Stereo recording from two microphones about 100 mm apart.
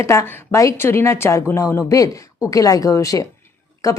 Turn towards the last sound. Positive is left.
turn(degrees=35)  # may be behind; listen again after turning